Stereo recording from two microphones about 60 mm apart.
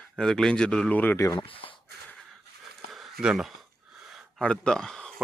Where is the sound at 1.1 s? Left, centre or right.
Left.